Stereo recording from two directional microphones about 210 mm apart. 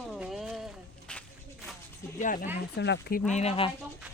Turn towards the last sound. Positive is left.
turn(degrees=30)  # may be behind; listen again after turning